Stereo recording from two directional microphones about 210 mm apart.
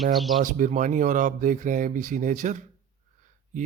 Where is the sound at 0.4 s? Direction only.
40° right (ahead or behind).